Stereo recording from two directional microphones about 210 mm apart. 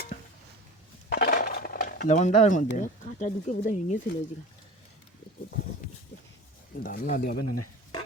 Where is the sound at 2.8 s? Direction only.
35° left (ahead or behind).